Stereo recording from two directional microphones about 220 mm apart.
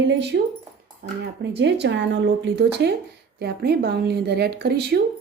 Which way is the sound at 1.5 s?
50° right (ahead or behind).